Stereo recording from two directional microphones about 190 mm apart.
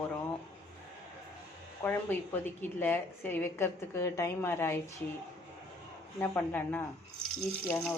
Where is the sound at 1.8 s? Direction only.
10° left (ahead or behind).